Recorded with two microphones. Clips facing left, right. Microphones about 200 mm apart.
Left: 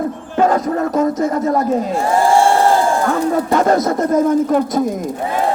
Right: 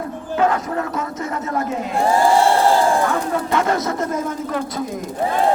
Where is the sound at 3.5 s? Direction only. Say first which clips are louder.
Left 5 dB; 40° left (ahead or behind).